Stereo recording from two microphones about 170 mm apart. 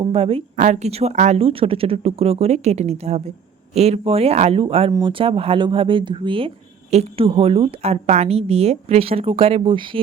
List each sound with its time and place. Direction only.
0.0 s a woman's voice: 35° right (ahead or behind)
0.5 s a woman's voice: 45° right (ahead or behind); by 10.0 s 30° right (ahead or behind)